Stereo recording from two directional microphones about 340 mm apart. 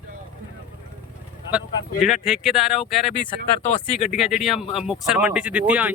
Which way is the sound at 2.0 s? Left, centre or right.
Centre.